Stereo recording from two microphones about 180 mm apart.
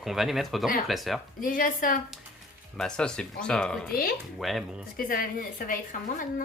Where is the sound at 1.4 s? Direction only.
50° left (ahead or behind).